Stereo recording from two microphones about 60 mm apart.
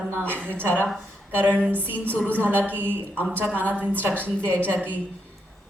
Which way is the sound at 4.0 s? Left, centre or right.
Right.